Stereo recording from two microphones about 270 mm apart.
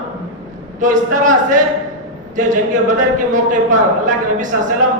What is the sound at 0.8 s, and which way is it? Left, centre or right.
A woman's voice, right.